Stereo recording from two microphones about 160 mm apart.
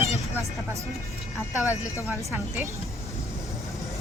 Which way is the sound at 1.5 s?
20° left (ahead or behind).